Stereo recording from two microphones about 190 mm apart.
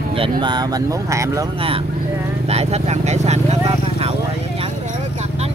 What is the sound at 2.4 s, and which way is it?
Speech, 35° right (ahead or behind).